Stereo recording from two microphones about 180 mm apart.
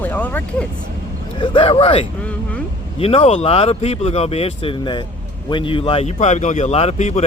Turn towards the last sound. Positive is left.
turn(degrees=40)  # may be behind; listen again after turning